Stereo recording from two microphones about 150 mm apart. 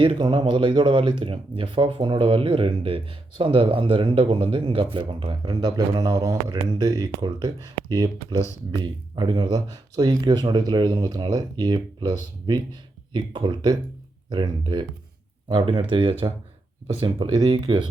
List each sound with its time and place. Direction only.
0.0 s speech: 30° right (ahead or behind)